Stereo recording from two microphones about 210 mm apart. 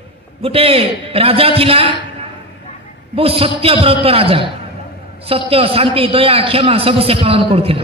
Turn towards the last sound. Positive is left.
turn(degrees=-25)  # may be behind; listen again after turning